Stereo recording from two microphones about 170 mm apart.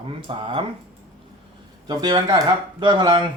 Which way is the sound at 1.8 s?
25° right (ahead or behind).